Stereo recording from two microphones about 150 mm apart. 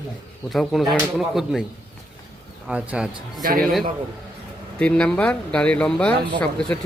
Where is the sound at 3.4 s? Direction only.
70° right (ahead or behind).